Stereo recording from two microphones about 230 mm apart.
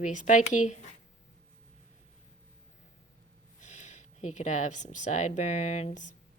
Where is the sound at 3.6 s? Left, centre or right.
Left.